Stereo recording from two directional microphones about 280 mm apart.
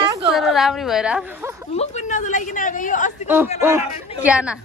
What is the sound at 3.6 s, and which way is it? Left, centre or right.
Speech, centre.